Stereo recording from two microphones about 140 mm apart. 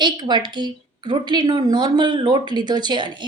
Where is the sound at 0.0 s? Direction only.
30° right (ahead or behind).